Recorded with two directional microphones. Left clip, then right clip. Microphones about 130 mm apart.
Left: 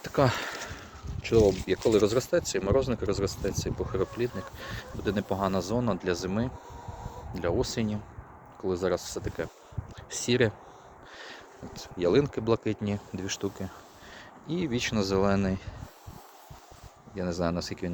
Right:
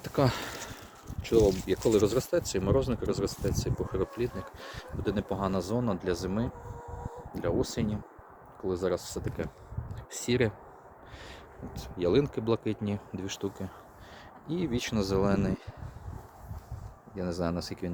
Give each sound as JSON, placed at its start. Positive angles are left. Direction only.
{"t": 0.0, "sound": "a sound", "side_deg": -20}
{"t": 1.2, "sound": "speech", "side_deg": -20}
{"t": 17.2, "sound": "speech", "side_deg": -10}